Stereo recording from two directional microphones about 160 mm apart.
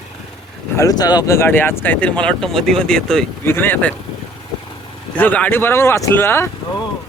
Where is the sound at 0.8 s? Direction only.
25° left (ahead or behind).